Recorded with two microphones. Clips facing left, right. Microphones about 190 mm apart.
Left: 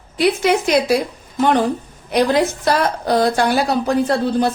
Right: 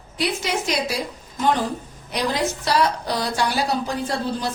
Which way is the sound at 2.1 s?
55° left (ahead or behind).